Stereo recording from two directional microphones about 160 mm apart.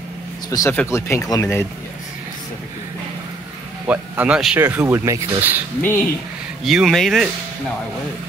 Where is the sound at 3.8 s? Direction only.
10° right (ahead or behind).